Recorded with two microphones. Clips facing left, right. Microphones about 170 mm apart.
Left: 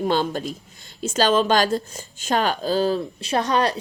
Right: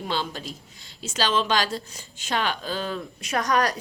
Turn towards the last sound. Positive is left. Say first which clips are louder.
# left 3 dB
turn(degrees=30)  # may be behind; listen again after turning